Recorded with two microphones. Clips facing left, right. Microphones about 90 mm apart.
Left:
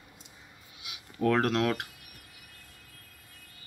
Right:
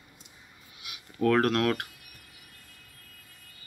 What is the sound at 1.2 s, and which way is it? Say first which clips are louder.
Speech: right 2 dB; 5° left (ahead or behind).